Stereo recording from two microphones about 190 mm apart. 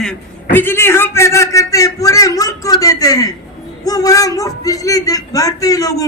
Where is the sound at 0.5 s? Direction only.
10° left (ahead or behind).